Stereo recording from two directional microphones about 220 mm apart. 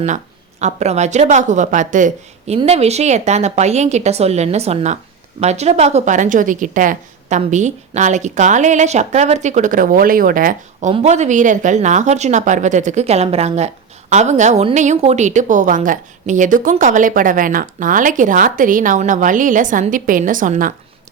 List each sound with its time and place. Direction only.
0.6 s a woman's voice: 30° right (ahead or behind)